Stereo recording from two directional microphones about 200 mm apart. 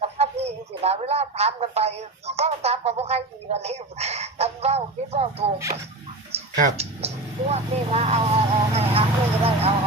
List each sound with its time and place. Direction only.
0.0 s speech: 30° right (ahead or behind)
6.6 s speech: 30° right (ahead or behind)